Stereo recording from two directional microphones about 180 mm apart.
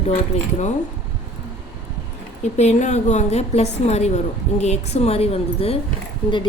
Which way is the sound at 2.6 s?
40° left (ahead or behind).